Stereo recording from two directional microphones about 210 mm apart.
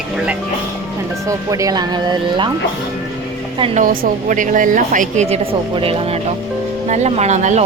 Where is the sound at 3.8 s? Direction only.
40° right (ahead or behind).